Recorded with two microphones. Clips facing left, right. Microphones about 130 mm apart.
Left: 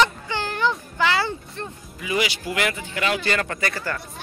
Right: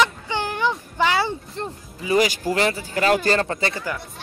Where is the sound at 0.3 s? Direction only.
15° right (ahead or behind).